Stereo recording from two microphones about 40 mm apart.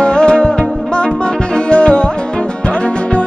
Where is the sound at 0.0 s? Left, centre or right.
Left.